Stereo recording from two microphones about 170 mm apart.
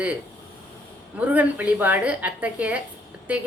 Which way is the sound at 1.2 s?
10° right (ahead or behind).